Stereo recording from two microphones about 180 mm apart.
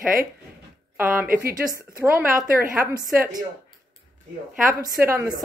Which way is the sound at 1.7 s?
15° right (ahead or behind).